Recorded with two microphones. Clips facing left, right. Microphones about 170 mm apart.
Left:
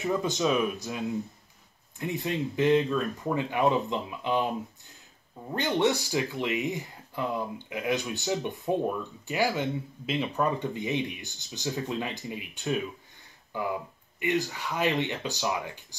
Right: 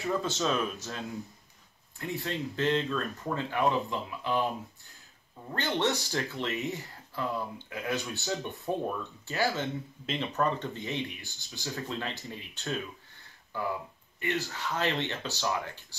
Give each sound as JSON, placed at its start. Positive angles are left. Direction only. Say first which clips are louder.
{"t": 0.0, "sound": "speech", "louder": "left 3 dB", "side_deg": 15}
{"t": 5.5, "sound": "speech", "louder": "left 4 dB", "side_deg": 15}